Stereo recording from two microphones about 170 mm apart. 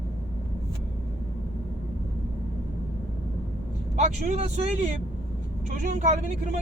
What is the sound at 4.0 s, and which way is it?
Speech, 45° right (ahead or behind).